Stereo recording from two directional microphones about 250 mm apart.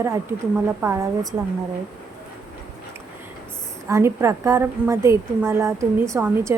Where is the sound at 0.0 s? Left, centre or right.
Centre.